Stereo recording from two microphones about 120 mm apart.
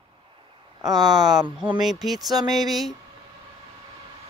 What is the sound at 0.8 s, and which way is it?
Speech, 35° right (ahead or behind).